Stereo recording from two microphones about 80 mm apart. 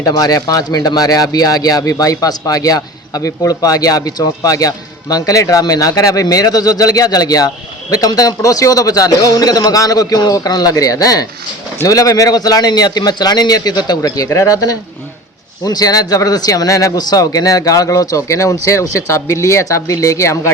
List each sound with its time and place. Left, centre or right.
0.1 s speech: left